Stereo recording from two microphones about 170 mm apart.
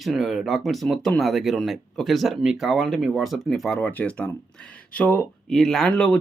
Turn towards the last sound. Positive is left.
turn(degrees=5)  # may be behind; listen again after turning